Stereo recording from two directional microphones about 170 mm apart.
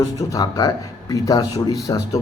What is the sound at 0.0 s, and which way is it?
A man's voice, 20° left (ahead or behind).